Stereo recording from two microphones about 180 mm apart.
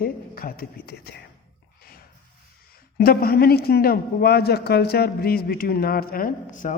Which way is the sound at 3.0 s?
55° left (ahead or behind).